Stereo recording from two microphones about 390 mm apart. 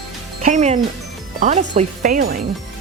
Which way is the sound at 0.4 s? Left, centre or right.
Centre.